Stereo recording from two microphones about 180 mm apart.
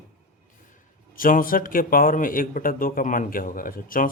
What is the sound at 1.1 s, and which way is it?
Speech, 50° left (ahead or behind).